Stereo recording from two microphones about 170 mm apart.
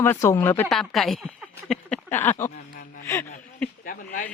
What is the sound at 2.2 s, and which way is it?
Speech, 15° left (ahead or behind).